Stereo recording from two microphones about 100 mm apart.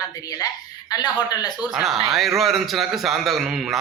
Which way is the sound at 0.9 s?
40° left (ahead or behind).